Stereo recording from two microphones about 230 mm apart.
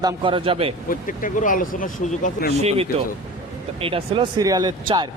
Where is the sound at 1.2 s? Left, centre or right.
Left.